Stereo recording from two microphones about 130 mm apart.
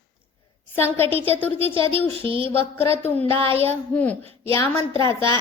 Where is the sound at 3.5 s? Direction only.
45° right (ahead or behind).